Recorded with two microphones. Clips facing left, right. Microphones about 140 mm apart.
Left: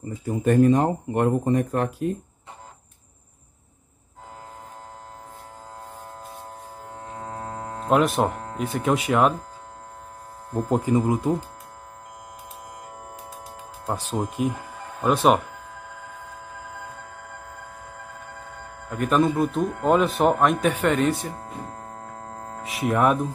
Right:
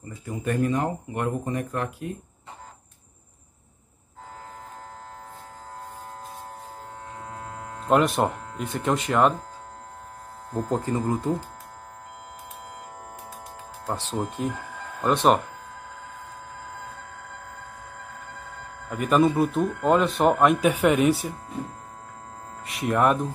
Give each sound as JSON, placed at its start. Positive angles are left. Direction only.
{"t": 0.4, "sound": "speech", "side_deg": 35}
{"t": 7.2, "sound": "hum", "side_deg": 40}
{"t": 7.9, "sound": "speech", "side_deg": 0}
{"t": 10.5, "sound": "speech", "side_deg": 15}
{"t": 13.8, "sound": "speech", "side_deg": 10}
{"t": 18.9, "sound": "speech", "side_deg": -5}
{"t": 20.7, "sound": "speech", "side_deg": -10}
{"t": 22.0, "sound": "a sound", "side_deg": 50}
{"t": 22.6, "sound": "speech", "side_deg": 0}